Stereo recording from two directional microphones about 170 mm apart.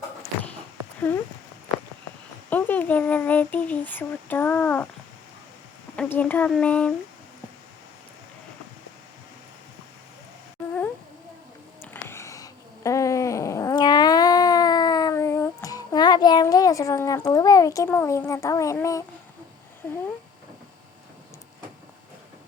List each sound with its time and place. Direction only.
0.9 s speech: 10° left (ahead or behind)
2.5 s speech: 10° left (ahead or behind)
6.0 s speech: 10° left (ahead or behind)
11.8 s a sound: 15° left (ahead or behind)